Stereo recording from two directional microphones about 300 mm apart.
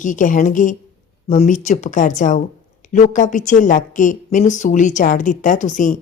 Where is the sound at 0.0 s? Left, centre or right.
Left.